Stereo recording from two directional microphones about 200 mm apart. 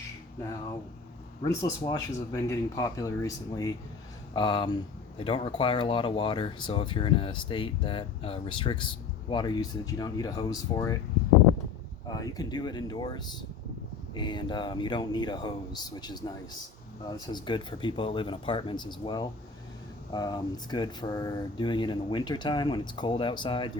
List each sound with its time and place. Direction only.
1.5 s speech: 15° left (ahead or behind)
12.0 s speech: 20° left (ahead or behind)